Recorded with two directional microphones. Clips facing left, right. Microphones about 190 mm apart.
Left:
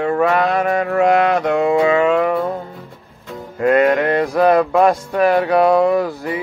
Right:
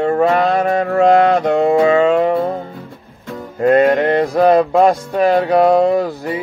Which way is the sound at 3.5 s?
30° right (ahead or behind).